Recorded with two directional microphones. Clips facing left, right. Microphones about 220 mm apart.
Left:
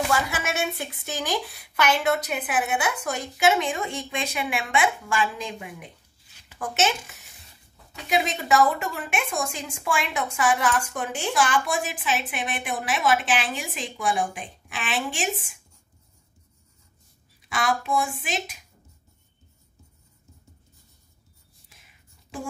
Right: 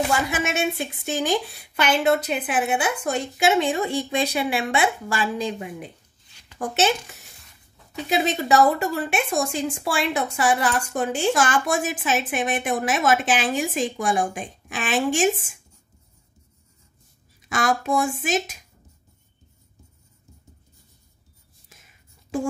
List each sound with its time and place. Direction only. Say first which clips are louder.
0.3 s a woman's voice: right 4 dB; 20° right (ahead or behind); by 15.2 s 45° right (ahead or behind)
17.5 s a woman's voice: right 3 dB; 45° right (ahead or behind)